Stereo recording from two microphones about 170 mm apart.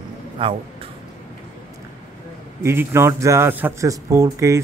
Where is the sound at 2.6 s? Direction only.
15° right (ahead or behind).